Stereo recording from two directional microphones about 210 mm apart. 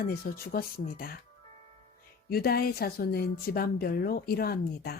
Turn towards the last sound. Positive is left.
turn(degrees=45)  # may be behind; listen again after turning